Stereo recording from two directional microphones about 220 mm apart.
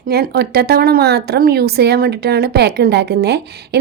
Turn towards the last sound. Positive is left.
turn(degrees=-50)  # may be behind; listen again after turning